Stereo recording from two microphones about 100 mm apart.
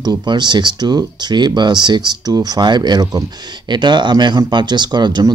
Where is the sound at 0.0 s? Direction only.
45° right (ahead or behind).